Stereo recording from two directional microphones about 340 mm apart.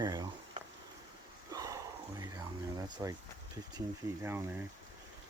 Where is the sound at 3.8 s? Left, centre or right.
Centre.